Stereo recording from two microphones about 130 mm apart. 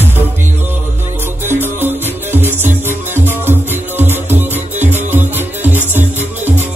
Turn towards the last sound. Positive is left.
turn(degrees=-15)  # may be behind; listen again after turning